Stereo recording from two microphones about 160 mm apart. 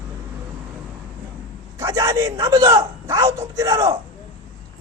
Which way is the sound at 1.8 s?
20° right (ahead or behind).